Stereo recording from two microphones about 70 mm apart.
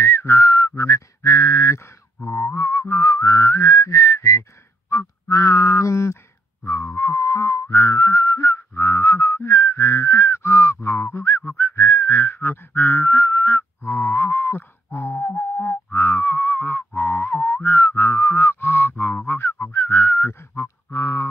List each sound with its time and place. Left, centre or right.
0.0 s whistling: left
15.1 s music: centre
17.6 s a sound: left